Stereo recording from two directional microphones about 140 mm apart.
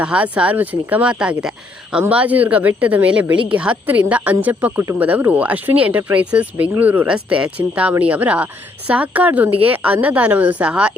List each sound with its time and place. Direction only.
0.0 s speech: 10° right (ahead or behind)